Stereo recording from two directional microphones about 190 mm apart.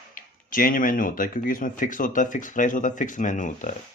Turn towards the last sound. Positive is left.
turn(degrees=40)  # may be behind; listen again after turning